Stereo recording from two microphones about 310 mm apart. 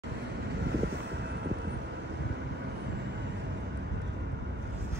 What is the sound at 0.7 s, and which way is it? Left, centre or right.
Vehicle, right.